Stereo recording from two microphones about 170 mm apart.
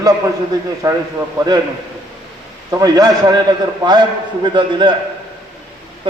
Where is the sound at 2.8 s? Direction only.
25° right (ahead or behind).